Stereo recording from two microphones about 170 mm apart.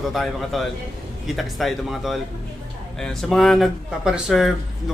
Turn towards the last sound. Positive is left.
turn(degrees=0)  # may be behind; listen again after turning